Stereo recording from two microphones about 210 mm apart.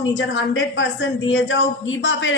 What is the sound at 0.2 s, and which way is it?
A woman's voice, 60° left (ahead or behind).